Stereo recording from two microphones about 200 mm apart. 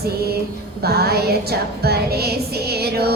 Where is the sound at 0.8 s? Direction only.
50° right (ahead or behind).